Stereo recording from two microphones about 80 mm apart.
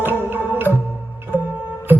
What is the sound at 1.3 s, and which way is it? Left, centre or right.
Music, left.